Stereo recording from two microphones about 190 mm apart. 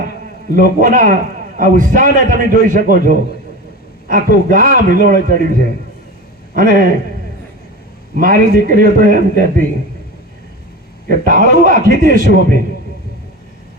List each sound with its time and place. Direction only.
0.5 s a man's voice: 45° right (ahead or behind)
8.1 s a man's voice: 45° right (ahead or behind)
11.1 s a man's voice: 45° right (ahead or behind)